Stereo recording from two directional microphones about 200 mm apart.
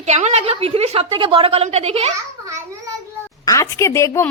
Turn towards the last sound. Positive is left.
turn(degrees=15)  # may be behind; listen again after turning